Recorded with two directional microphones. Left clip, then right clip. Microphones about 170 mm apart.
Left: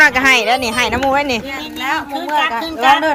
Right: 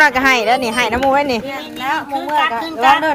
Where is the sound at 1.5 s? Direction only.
50° right (ahead or behind).